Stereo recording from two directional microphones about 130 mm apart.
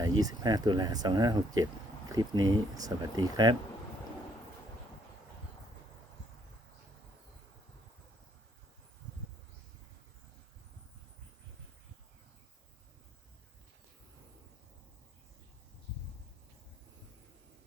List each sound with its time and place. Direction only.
0.0 s speech: 30° right (ahead or behind)